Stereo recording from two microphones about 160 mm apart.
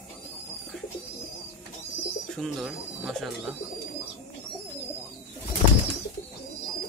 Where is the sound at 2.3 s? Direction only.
5° right (ahead or behind).